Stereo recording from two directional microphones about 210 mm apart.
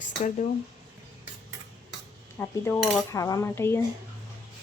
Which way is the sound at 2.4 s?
10° left (ahead or behind).